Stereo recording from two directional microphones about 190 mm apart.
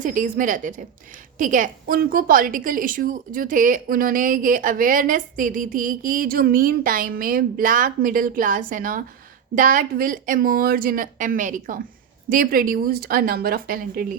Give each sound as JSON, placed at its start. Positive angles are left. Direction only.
{"t": 0.0, "sound": "a woman's voice", "side_deg": -45}